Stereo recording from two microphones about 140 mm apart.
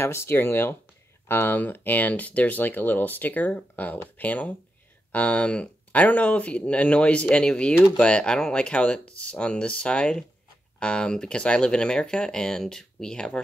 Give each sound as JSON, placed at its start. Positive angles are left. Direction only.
{"t": 0.0, "sound": "speech", "side_deg": 20}